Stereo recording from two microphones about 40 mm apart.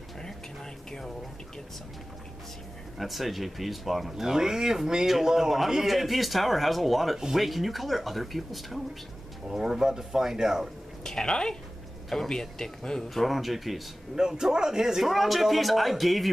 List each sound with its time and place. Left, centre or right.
3.0 s a man's voice: centre
4.2 s a man's voice: centre
7.2 s speech: centre
7.4 s a man's voice: centre
9.5 s speech: centre
11.1 s speech: centre
13.1 s a man's voice: centre
14.1 s a man's voice: centre